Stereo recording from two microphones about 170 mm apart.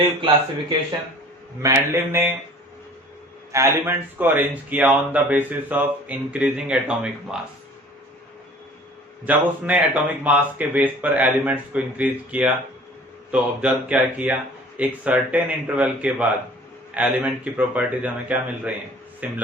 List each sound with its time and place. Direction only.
1.6 s speech: 15° right (ahead or behind)
3.5 s speech: 15° right (ahead or behind)
9.2 s speech: 10° right (ahead or behind)